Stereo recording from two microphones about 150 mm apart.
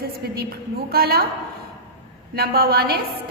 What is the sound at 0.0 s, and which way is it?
A woman's voice, 90° right.